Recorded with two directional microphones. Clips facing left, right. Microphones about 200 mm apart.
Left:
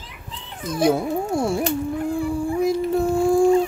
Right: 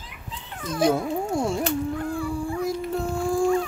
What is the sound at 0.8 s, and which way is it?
Speech, 10° left (ahead or behind).